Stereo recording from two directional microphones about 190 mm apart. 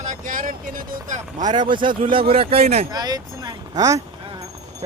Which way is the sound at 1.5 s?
25° right (ahead or behind).